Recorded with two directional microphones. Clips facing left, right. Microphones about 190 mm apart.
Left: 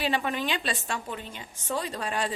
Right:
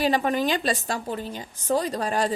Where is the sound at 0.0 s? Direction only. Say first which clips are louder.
Right 6 dB; 40° right (ahead or behind).